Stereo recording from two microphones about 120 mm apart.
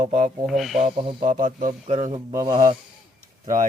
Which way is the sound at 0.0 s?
90° right.